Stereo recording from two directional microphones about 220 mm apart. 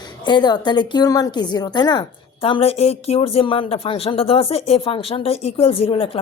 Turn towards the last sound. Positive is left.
turn(degrees=25)  # may be behind; listen again after turning